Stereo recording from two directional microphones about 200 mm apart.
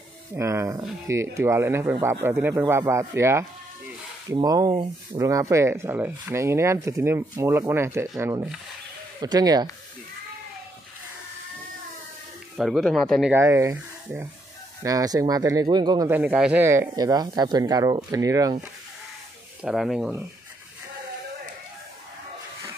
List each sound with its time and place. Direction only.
0.4 s speech: 15° right (ahead or behind)
12.5 s speech: centre (ahead or behind)
13.3 s speech: 15° right (ahead or behind)
16.1 s speech: 10° right (ahead or behind)
19.6 s speech: centre (ahead or behind)